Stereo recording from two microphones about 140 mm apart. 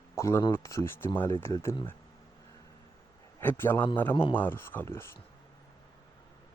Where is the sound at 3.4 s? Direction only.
15° left (ahead or behind).